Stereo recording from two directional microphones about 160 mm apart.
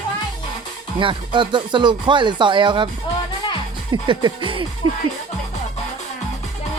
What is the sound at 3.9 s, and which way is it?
Speech, 30° right (ahead or behind).